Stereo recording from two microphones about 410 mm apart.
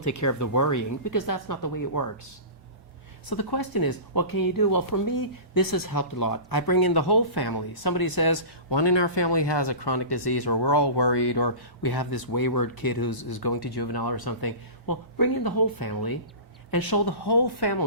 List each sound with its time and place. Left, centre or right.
0.0 s speech: left
3.2 s speech: left